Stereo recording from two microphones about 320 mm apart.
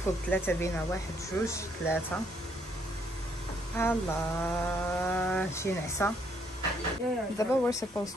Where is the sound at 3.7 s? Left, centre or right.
Centre.